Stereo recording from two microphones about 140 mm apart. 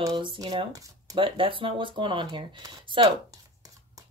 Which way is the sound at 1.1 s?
40° right (ahead or behind).